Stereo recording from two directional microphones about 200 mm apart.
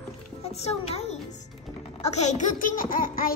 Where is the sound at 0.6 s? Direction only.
30° left (ahead or behind).